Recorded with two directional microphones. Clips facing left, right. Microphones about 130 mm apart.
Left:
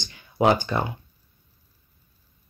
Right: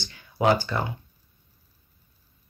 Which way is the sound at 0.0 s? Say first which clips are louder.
Left 2 dB; 20° left (ahead or behind).